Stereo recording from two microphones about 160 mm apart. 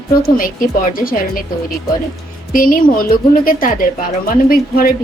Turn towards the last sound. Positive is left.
turn(degrees=65)  # may be behind; listen again after turning